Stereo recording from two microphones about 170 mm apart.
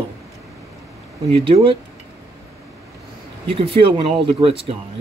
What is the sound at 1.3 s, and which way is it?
Speech, 35° right (ahead or behind).